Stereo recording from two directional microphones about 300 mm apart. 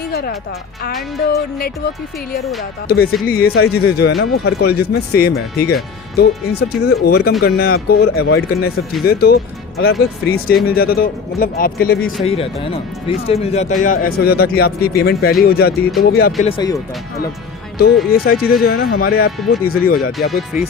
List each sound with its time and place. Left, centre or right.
0.0 s music: left
1.3 s speech: left
2.8 s speech: left
12.2 s speech: centre
16.4 s speech: centre
18.1 s speech: left
18.3 s speech: centre
18.6 s speech: left
20.3 s speech: centre